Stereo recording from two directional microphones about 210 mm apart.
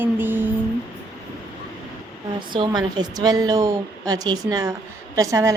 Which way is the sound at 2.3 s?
20° right (ahead or behind).